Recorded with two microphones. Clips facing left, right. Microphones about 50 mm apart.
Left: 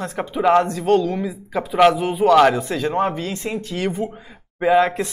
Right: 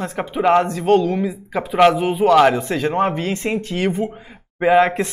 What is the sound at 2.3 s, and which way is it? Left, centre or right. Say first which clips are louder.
A woman's voice: even; centre.